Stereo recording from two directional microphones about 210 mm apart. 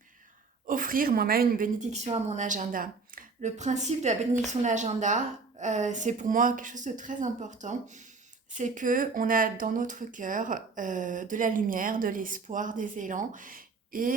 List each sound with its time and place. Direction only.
0.7 s a woman's voice: 40° right (ahead or behind)